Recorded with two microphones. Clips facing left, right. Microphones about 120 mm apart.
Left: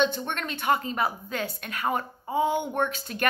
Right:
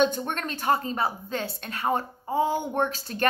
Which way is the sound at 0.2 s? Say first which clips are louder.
Right 1 dB; 40° right (ahead or behind).